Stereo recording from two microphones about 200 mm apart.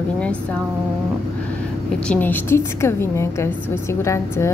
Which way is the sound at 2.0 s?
10° left (ahead or behind).